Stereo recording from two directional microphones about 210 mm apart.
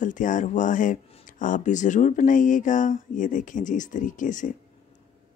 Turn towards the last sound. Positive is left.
turn(degrees=40)  # may be behind; listen again after turning